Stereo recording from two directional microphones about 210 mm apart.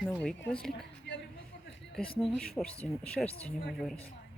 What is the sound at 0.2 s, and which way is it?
Speech, 5° left (ahead or behind).